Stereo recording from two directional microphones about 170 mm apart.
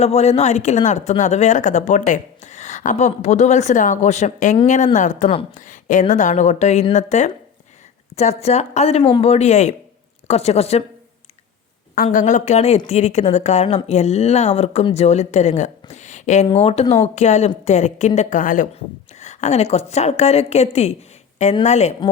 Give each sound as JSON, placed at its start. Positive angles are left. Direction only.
{"t": 0.0, "sound": "a woman's voice", "side_deg": 40}
{"t": 12.0, "sound": "a woman's voice", "side_deg": 45}